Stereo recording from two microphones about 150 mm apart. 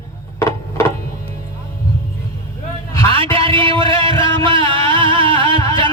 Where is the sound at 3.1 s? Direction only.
35° right (ahead or behind).